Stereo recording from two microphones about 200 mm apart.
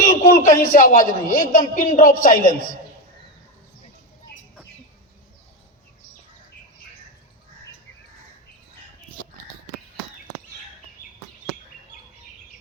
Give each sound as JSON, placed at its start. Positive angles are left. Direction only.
{"t": 0.0, "sound": "a man's voice", "side_deg": 45}